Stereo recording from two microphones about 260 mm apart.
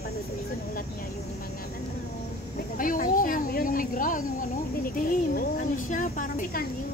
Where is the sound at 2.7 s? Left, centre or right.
Left.